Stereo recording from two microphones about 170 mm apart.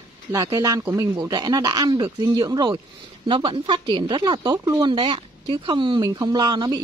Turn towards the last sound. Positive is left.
turn(degrees=-25)  # may be behind; listen again after turning